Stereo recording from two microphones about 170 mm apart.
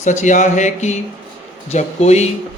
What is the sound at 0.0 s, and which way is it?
Speech, 45° left (ahead or behind).